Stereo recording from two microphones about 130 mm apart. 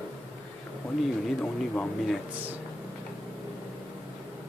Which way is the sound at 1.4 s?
5° left (ahead or behind).